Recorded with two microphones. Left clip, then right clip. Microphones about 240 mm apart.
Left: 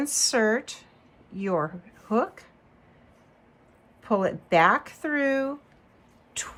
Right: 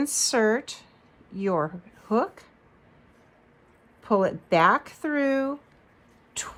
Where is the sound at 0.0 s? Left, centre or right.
Right.